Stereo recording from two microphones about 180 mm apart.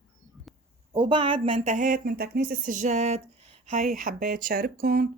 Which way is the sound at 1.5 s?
45° right (ahead or behind).